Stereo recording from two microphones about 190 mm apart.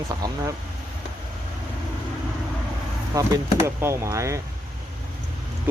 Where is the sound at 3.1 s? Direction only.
15° right (ahead or behind).